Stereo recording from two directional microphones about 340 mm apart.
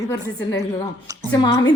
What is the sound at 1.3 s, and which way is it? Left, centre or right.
Speech, centre.